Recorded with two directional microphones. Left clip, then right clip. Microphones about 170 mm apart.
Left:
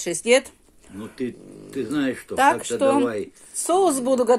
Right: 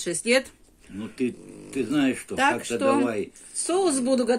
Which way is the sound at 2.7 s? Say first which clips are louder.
Left 3 dB; 20° left (ahead or behind).